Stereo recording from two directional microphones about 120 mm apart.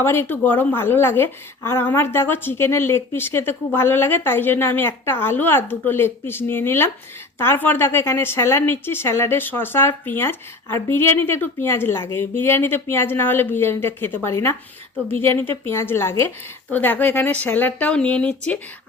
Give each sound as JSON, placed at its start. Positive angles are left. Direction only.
{"t": 0.0, "sound": "a woman's voice", "side_deg": 20}